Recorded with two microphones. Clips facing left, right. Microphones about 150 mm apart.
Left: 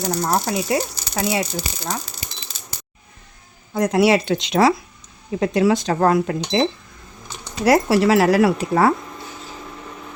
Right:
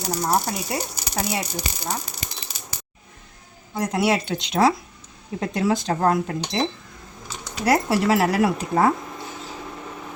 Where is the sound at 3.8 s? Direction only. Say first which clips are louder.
Left 6 dB; 90° left.